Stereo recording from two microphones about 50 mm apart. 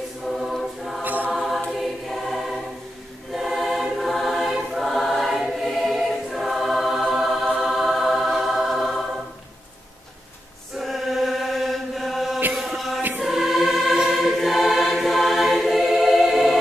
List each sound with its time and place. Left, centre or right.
0.6 s choir: centre
1.0 s choir: right
1.3 s choir: centre
10.8 s chant: centre
13.1 s music: centre
14.1 s choir: centre